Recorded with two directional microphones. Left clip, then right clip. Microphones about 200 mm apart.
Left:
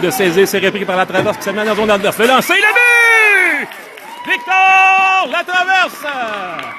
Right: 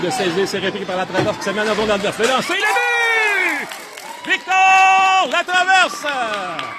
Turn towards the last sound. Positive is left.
turn(degrees=0)  # may be behind; listen again after turning